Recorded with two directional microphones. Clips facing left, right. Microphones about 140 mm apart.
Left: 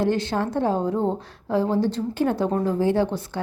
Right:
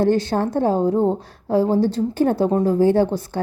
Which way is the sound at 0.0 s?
40° right (ahead or behind).